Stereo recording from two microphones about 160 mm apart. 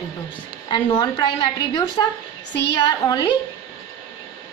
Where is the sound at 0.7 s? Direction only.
30° left (ahead or behind).